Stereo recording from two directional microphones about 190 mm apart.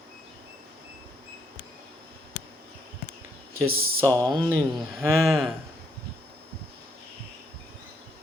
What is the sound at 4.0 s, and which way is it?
Speech, 15° right (ahead or behind).